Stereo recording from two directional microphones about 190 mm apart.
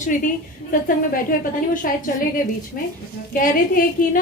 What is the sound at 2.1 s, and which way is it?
Speech, 50° left (ahead or behind).